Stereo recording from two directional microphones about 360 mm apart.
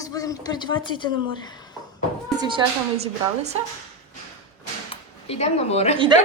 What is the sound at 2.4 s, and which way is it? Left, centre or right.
Speech, centre.